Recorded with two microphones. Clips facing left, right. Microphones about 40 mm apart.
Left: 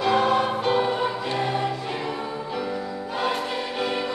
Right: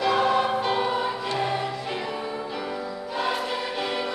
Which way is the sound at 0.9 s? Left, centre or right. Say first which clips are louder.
Left 1 dB; centre.